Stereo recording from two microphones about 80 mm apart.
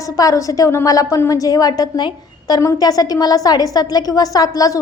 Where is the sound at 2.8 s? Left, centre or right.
Left.